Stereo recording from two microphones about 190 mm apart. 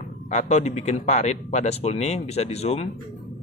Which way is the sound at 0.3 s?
35° left (ahead or behind).